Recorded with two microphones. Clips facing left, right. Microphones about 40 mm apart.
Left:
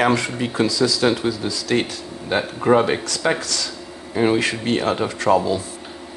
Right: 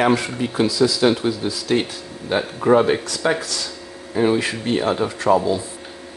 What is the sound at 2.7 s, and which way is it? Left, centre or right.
Speech, left.